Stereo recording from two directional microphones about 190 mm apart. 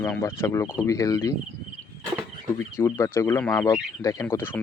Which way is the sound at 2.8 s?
15° left (ahead or behind).